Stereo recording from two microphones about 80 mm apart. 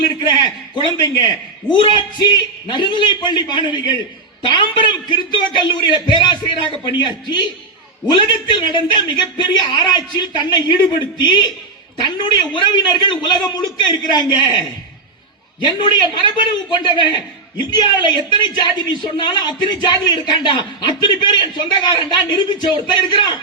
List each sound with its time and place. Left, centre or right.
0.2 s a man's voice: left
1.7 s speech: right
2.3 s a man's voice: left
15.6 s a man's voice: left